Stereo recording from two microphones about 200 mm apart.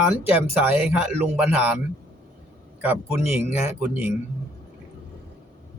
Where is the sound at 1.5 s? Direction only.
5° right (ahead or behind).